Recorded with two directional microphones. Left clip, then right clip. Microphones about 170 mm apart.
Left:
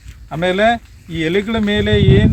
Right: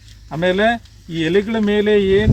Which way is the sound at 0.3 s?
35° left (ahead or behind).